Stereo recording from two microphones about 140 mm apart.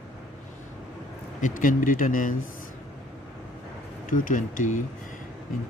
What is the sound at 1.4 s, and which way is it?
Speech, 65° left (ahead or behind).